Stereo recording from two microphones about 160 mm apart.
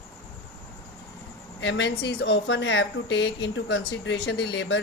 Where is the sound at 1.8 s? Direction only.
90° left.